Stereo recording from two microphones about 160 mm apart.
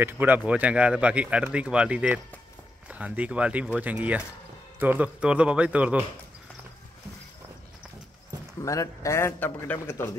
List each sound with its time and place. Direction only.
0.0 s speech: 10° right (ahead or behind)
8.6 s a man's voice: 20° left (ahead or behind)